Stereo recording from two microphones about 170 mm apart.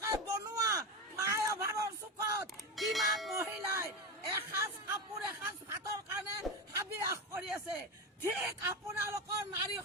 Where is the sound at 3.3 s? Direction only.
15° right (ahead or behind).